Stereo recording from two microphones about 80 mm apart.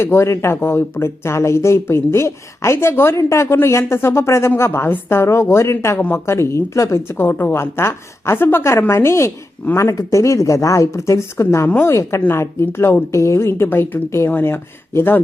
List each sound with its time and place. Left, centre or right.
0.0 s speech: left